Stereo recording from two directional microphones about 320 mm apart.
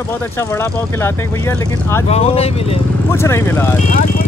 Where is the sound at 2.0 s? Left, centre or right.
Centre.